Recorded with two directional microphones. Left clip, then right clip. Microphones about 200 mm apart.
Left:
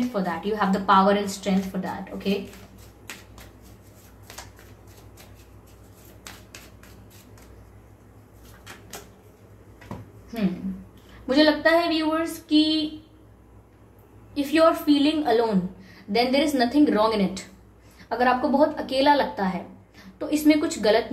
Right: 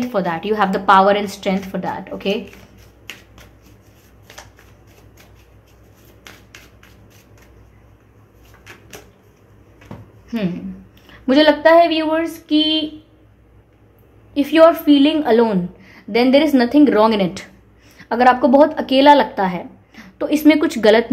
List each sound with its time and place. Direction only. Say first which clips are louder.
0.0 s a woman's voice: right 7 dB; 50° right (ahead or behind)
11.2 s a woman's voice: right 8 dB; 45° right (ahead or behind)
14.3 s a woman's voice: right 8 dB; 45° right (ahead or behind)